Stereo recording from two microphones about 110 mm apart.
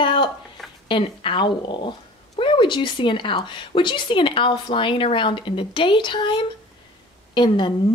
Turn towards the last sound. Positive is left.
turn(degrees=45)  # may be behind; listen again after turning